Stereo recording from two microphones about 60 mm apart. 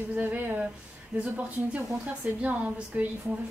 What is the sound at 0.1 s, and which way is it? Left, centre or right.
A woman's voice, right.